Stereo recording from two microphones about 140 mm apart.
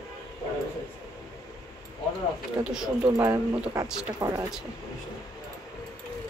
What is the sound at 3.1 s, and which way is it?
Speech, 20° right (ahead or behind).